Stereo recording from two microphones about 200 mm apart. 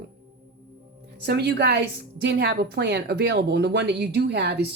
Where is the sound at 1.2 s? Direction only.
55° right (ahead or behind).